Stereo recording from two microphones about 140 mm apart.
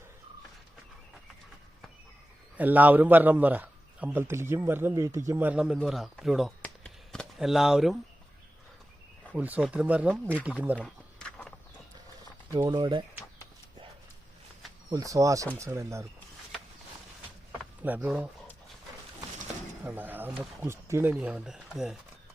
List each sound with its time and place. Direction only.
2.6 s a man's voice: 10° right (ahead or behind)
6.6 s a sound: 5° left (ahead or behind)
9.3 s a man's voice: 10° right (ahead or behind)
10.8 s a sound: 10° left (ahead or behind)
12.5 s speech: 25° right (ahead or behind)
14.8 s speech: 25° right (ahead or behind)
17.8 s a man's voice: 10° right (ahead or behind)
19.8 s a man's voice: 15° right (ahead or behind)